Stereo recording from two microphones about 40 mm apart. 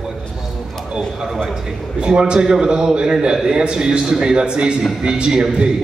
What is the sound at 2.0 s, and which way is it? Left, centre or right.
A man's voice, right.